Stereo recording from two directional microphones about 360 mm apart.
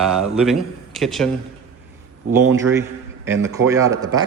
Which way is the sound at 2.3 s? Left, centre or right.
Centre.